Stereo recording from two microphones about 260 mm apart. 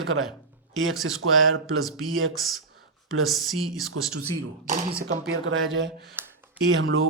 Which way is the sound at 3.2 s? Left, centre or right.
Centre.